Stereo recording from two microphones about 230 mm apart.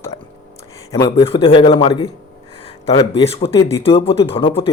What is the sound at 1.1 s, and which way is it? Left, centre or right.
Speech, left.